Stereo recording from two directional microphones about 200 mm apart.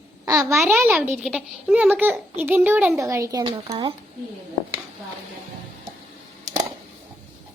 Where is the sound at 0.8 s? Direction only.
10° right (ahead or behind).